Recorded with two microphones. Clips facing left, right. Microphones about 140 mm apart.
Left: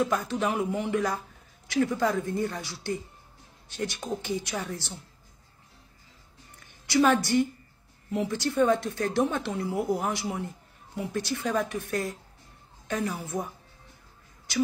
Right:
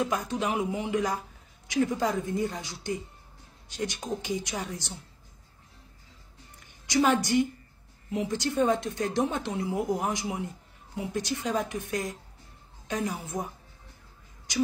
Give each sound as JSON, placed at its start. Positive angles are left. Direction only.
{"t": 0.1, "sound": "speech", "side_deg": -15}
{"t": 6.9, "sound": "speech", "side_deg": -15}